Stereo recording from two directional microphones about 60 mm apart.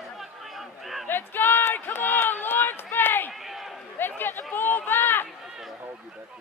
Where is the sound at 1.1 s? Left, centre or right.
Left.